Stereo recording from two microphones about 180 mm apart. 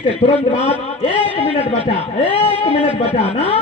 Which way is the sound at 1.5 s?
35° left (ahead or behind).